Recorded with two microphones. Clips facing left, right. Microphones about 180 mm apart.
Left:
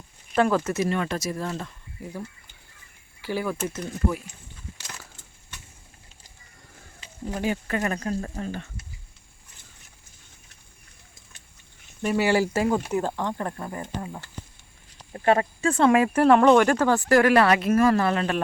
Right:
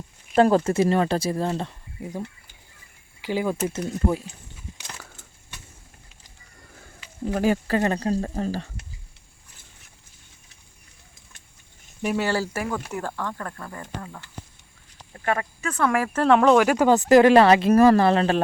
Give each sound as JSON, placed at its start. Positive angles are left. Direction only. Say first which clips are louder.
{"t": 0.3, "sound": "speech", "louder": "right 4 dB", "side_deg": -30}
{"t": 3.2, "sound": "speech", "louder": "right 3 dB", "side_deg": -15}
{"t": 7.3, "sound": "speech", "louder": "right 5 dB", "side_deg": -45}
{"t": 12.0, "sound": "speech", "louder": "left 1 dB", "side_deg": 5}
{"t": 12.3, "sound": "speech", "louder": "left 4 dB", "side_deg": 20}
{"t": 16.2, "sound": "speech", "louder": "right 1 dB", "side_deg": 0}